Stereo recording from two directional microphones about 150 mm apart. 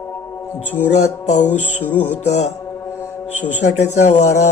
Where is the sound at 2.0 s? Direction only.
45° left (ahead or behind).